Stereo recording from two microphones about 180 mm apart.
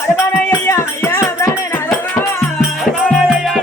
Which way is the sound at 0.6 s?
15° left (ahead or behind).